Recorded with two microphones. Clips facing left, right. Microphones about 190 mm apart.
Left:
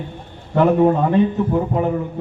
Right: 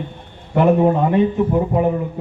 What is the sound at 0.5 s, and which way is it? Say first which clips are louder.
A man's voice: even; 15° right (ahead or behind).